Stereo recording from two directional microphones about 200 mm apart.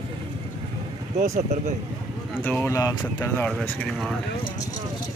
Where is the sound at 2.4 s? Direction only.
10° left (ahead or behind).